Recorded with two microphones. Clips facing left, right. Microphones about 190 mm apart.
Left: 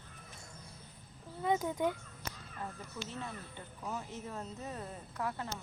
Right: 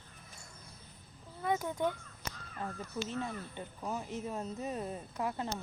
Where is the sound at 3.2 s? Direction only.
15° right (ahead or behind).